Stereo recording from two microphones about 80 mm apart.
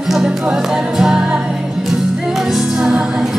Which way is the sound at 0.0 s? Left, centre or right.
Centre.